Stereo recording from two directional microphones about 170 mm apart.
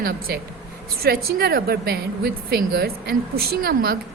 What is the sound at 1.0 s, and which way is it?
A woman's voice, 65° right (ahead or behind).